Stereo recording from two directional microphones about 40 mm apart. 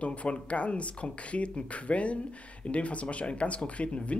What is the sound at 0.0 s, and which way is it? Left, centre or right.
Speech, left.